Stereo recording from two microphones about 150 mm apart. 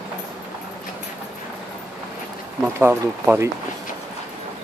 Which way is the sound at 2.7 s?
15° right (ahead or behind).